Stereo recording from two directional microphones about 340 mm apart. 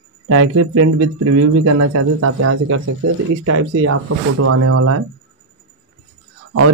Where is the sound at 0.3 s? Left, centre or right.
Right.